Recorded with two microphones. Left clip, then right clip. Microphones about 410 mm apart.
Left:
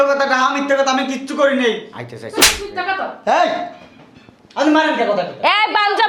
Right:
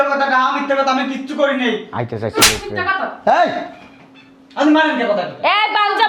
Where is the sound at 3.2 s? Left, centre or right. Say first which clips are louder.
Right 1 dB; right.